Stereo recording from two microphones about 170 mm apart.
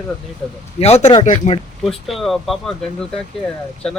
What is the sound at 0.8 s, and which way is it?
Speech, 40° left (ahead or behind).